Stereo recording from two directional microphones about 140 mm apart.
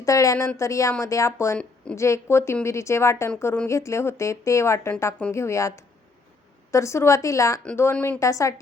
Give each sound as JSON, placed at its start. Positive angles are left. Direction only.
{"t": 0.0, "sound": "speech", "side_deg": 25}
{"t": 1.5, "sound": "a woman's voice", "side_deg": 5}
{"t": 2.0, "sound": "speech", "side_deg": 20}
{"t": 7.9, "sound": "a woman's voice", "side_deg": 10}
{"t": 8.2, "sound": "speech", "side_deg": 20}